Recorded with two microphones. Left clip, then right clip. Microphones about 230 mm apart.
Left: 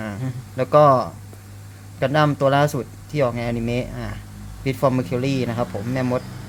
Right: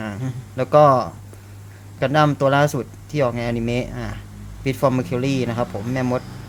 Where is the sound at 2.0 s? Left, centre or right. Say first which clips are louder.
Right 1 dB; centre.